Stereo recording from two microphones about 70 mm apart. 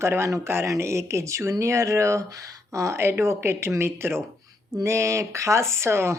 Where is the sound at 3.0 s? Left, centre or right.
Right.